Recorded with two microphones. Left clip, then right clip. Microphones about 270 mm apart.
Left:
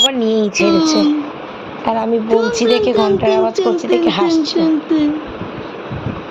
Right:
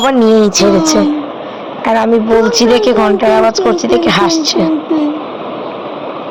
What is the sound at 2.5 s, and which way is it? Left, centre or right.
Speech, centre.